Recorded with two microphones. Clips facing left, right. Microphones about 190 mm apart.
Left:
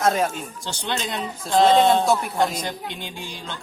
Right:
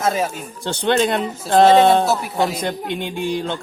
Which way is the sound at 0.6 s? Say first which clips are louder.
Right 12 dB; 60° right (ahead or behind).